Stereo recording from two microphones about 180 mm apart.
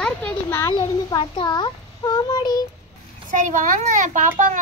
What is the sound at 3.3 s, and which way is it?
A child's voice, 45° right (ahead or behind).